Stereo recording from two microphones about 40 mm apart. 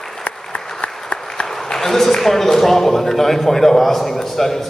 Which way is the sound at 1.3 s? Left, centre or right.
Centre.